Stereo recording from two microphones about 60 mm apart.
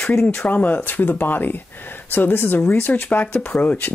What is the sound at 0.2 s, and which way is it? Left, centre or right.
Speech, left.